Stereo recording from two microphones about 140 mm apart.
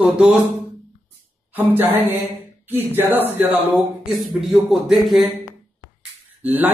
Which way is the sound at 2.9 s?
15° right (ahead or behind).